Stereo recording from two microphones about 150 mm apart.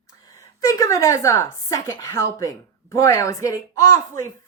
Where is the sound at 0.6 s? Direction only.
20° left (ahead or behind).